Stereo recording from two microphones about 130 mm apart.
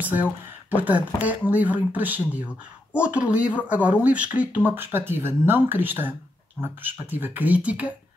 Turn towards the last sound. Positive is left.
turn(degrees=-10)  # may be behind; listen again after turning